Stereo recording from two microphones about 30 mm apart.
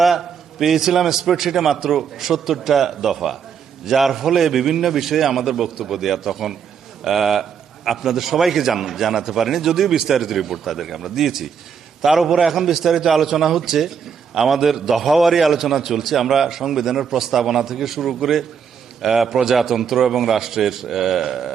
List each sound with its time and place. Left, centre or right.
0.0 s a man's voice: centre
12.5 s a man's voice: centre